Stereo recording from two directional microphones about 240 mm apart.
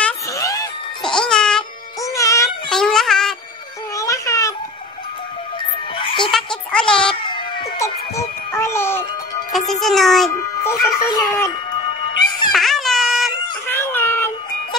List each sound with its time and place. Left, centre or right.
0.0 s music: centre
1.0 s music: centre
2.0 s music: centre
2.7 s music: centre
3.9 s music: centre
5.9 s music: left
6.3 s music: centre
7.2 s baby cry: centre
9.5 s a child's voice: centre
12.5 s a sound: centre
13.7 s music: centre